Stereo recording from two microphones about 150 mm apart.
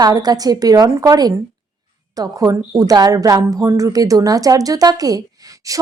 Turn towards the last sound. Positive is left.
turn(degrees=-20)  # may be behind; listen again after turning